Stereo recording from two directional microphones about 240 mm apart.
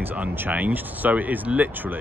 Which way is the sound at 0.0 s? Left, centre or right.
Centre.